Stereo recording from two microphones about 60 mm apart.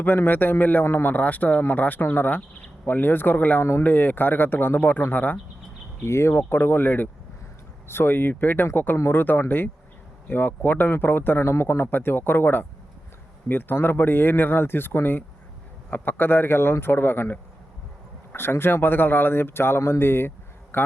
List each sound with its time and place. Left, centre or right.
0.0 s a man's voice: left
6.0 s a man's voice: left